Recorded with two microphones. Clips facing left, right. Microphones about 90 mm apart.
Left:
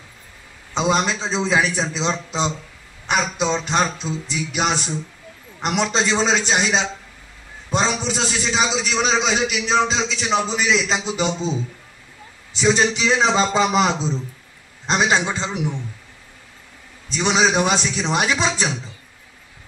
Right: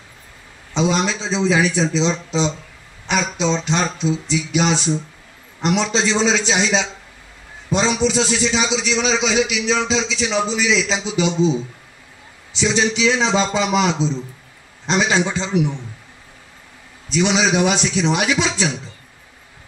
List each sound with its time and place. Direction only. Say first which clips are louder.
0.7 s a man's voice: right 1 dB; 45° left (ahead or behind)
12.5 s a man's voice: left 1 dB; 45° left (ahead or behind)
14.9 s a man's voice: right 1 dB; 40° left (ahead or behind)
17.1 s a man's voice: right 1 dB; 40° left (ahead or behind)